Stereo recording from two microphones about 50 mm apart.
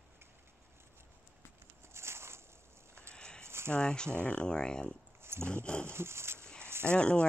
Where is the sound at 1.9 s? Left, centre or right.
Right.